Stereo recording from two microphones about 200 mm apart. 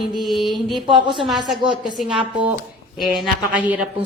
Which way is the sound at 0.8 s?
25° right (ahead or behind).